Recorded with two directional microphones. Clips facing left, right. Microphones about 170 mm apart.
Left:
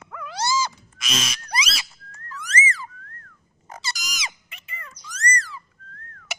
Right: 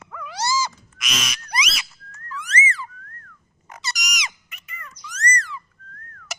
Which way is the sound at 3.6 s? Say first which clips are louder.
Right 1 dB; 30° left (ahead or behind).